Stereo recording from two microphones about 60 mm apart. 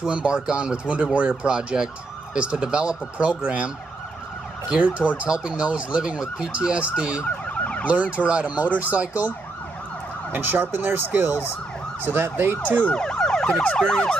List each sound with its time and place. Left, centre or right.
0.1 s ambulance: centre
10.3 s ambulance: right
12.1 s ambulance: right
12.7 s emergency vehicle: centre